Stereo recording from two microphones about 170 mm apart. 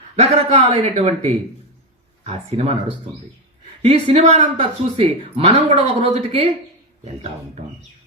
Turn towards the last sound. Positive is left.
turn(degrees=-40)  # may be behind; listen again after turning